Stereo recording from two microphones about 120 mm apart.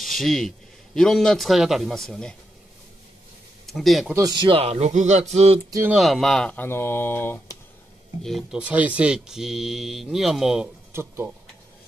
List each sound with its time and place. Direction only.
0.0 s a sound: centre (ahead or behind)
0.9 s speech: 5° left (ahead or behind)
3.6 s speech: centre (ahead or behind)
4.1 s speech: 35° right (ahead or behind)
4.6 s speech: 60° right (ahead or behind)
5.9 s speech: centre (ahead or behind); by 7.5 s 20° left (ahead or behind)
8.2 s speech: centre (ahead or behind)
8.5 s speech: 10° right (ahead or behind)
10.9 s speech: 20° right (ahead or behind)